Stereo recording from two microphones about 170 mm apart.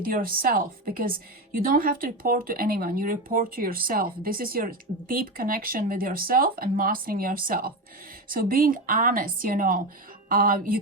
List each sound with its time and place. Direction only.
0.0 s speech: 55° right (ahead or behind)